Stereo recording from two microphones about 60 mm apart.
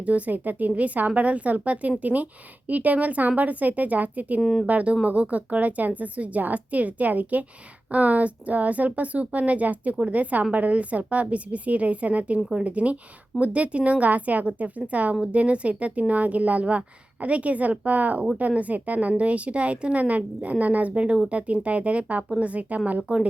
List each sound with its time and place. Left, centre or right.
0.0 s speech: right
4.4 s speech: centre
4.6 s speech: right